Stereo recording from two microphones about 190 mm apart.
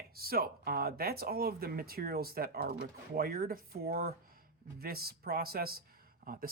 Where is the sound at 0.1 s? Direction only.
50° right (ahead or behind).